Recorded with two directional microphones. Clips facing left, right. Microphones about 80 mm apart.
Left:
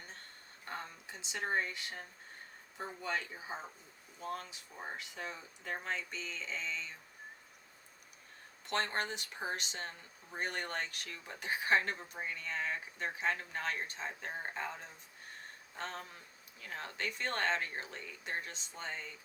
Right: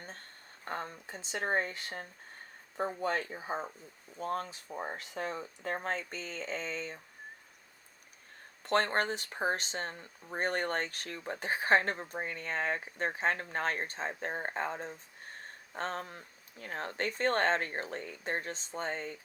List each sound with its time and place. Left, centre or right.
0.6 s speech: right
8.6 s speech: right